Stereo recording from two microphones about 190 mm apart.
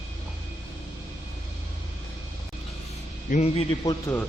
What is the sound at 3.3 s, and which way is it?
Speech, 35° left (ahead or behind).